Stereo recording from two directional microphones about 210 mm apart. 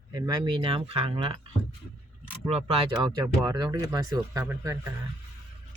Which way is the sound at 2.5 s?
30° right (ahead or behind).